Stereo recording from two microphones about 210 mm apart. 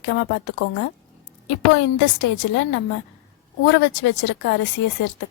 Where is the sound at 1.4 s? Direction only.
60° left (ahead or behind).